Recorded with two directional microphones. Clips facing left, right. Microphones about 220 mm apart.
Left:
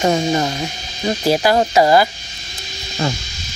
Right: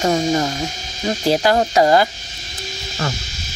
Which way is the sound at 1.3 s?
10° left (ahead or behind).